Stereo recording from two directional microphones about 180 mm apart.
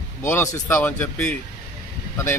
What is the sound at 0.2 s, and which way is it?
Speech, 15° left (ahead or behind).